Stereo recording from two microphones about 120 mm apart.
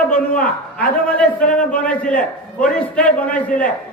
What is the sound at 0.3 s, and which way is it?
A man's voice, 10° left (ahead or behind).